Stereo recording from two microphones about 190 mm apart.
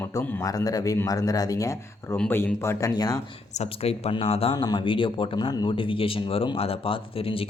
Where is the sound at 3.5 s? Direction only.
35° left (ahead or behind).